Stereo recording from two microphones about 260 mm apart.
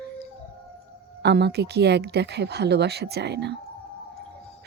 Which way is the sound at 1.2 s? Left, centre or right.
Right.